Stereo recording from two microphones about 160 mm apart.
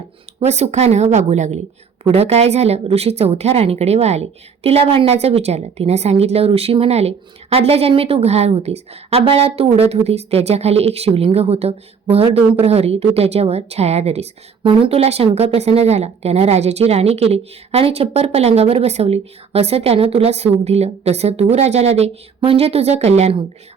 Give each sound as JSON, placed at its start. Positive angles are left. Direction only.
{"t": 0.4, "sound": "a woman's voice", "side_deg": -45}